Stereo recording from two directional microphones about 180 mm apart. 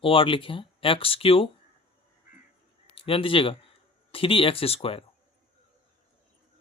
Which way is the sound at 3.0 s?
30° left (ahead or behind).